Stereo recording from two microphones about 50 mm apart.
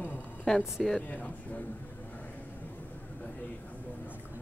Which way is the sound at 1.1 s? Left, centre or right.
Left.